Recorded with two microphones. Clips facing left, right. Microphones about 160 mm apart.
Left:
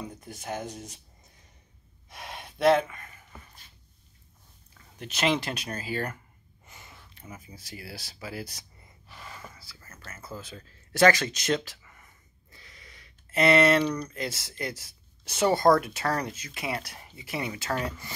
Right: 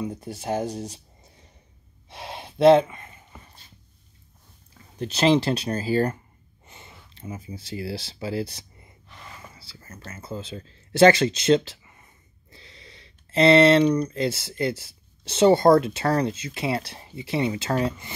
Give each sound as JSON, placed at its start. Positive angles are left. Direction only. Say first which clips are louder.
{"t": 0.1, "sound": "speech", "louder": "right 8 dB", "side_deg": -30}
{"t": 2.0, "sound": "gasp", "louder": "right 5 dB", "side_deg": -30}
{"t": 4.9, "sound": "speech", "louder": "right 7 dB", "side_deg": -30}
{"t": 9.6, "sound": "a sound", "louder": "right 6 dB", "side_deg": -25}
{"t": 14.6, "sound": "speech", "louder": "right 9 dB", "side_deg": -30}